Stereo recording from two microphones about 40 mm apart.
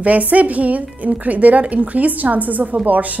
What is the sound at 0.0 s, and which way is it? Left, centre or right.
A woman's voice, right.